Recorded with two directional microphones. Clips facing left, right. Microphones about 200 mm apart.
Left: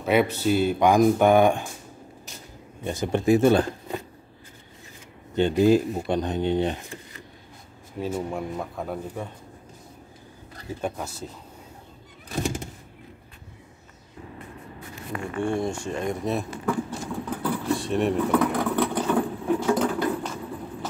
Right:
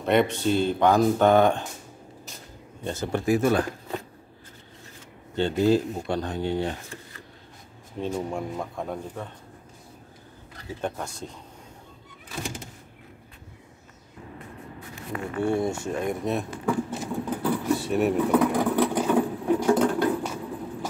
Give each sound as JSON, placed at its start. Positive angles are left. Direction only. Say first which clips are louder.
{"t": 0.0, "sound": "speech", "louder": "even", "side_deg": 5}
{"t": 2.8, "sound": "speech", "louder": "left 3 dB", "side_deg": 15}
{"t": 5.6, "sound": "speech", "louder": "left 2 dB", "side_deg": 15}
{"t": 8.0, "sound": "a man's voice", "louder": "even", "side_deg": 5}
{"t": 10.8, "sound": "a man's voice", "louder": "even", "side_deg": 5}
{"t": 15.3, "sound": "a sound", "louder": "right 1 dB", "side_deg": -5}